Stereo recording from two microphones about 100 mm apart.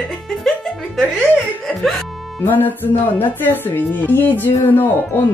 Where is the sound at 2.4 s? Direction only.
20° left (ahead or behind).